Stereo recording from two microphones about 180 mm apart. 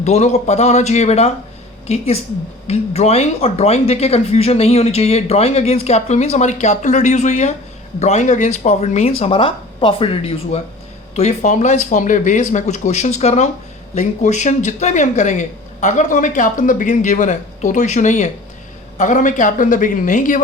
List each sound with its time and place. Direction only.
0.0 s speech: 40° left (ahead or behind)